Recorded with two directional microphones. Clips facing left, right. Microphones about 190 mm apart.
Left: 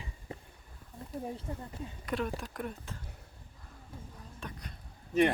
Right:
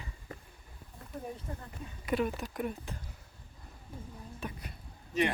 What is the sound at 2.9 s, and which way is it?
Speech, 15° right (ahead or behind).